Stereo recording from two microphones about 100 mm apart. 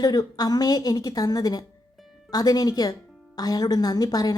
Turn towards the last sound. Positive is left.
turn(degrees=40)  # may be behind; listen again after turning